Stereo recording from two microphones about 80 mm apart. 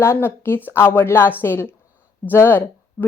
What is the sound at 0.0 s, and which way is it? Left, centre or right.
A woman's voice, left.